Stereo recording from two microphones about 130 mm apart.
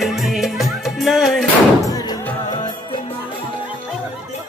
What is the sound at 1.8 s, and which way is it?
Music, 30° left (ahead or behind).